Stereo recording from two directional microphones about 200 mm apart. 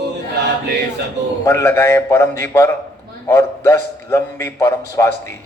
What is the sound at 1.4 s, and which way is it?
A man's voice, 15° left (ahead or behind).